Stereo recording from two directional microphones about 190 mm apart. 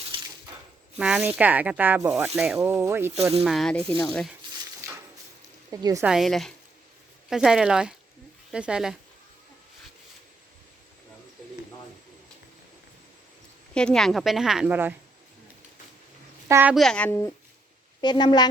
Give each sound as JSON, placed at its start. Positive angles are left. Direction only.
{"t": 0.1, "sound": "a sound", "side_deg": -25}
{"t": 0.9, "sound": "speech", "side_deg": -5}
{"t": 3.4, "sound": "a woman's voice", "side_deg": 0}
{"t": 5.7, "sound": "speech", "side_deg": -15}
{"t": 6.1, "sound": "a woman's voice", "side_deg": 0}
{"t": 13.7, "sound": "a woman's voice", "side_deg": 5}
{"t": 16.5, "sound": "speech", "side_deg": -10}
{"t": 16.7, "sound": "speech", "side_deg": 5}
{"t": 18.0, "sound": "a woman's voice", "side_deg": 25}